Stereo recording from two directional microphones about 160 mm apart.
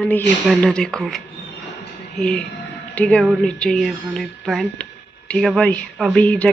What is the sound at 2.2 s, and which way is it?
A woman's voice, 5° left (ahead or behind).